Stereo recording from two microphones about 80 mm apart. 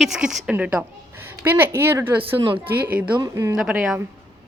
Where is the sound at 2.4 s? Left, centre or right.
Right.